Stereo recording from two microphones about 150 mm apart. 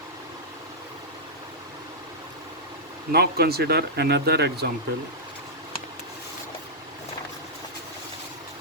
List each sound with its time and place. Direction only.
3.1 s speech: 90° right